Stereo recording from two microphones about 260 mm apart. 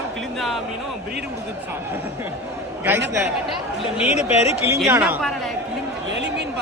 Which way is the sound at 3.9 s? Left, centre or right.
Left.